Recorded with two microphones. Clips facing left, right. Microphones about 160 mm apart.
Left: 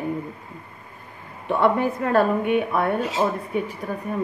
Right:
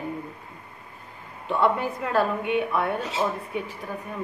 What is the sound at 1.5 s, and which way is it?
A woman's voice, 55° left (ahead or behind).